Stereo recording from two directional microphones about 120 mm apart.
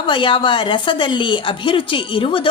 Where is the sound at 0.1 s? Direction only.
45° left (ahead or behind).